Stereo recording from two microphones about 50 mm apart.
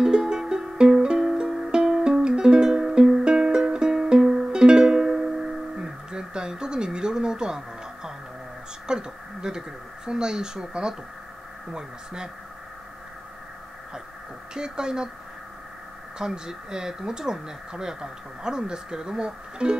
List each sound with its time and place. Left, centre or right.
0.0 s music: centre
5.8 s a sound: centre
8.8 s speech: centre
14.5 s speech: centre
16.2 s speech: centre